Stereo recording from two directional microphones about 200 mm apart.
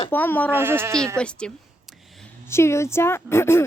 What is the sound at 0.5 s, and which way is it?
Speech, 10° right (ahead or behind).